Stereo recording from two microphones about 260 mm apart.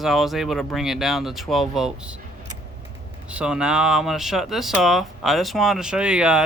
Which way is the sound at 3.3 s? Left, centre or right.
Centre.